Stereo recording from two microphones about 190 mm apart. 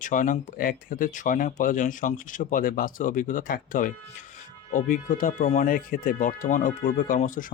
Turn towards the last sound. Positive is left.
turn(degrees=45)  # may be behind; listen again after turning